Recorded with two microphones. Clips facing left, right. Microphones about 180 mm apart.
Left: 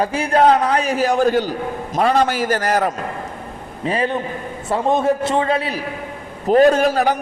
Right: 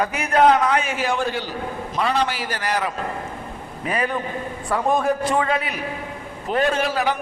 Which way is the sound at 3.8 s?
30° left (ahead or behind).